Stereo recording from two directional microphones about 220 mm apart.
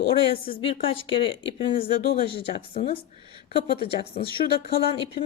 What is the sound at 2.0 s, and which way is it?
Speech, 45° left (ahead or behind).